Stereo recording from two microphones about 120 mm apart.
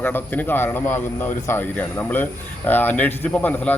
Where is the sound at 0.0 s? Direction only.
15° left (ahead or behind).